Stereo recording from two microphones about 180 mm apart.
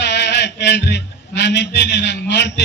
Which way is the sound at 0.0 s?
70° left (ahead or behind).